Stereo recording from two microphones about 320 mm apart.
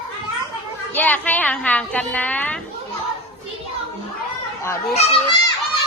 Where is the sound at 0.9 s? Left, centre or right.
Centre.